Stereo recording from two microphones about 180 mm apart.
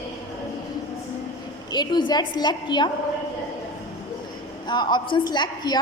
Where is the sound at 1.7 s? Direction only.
25° left (ahead or behind).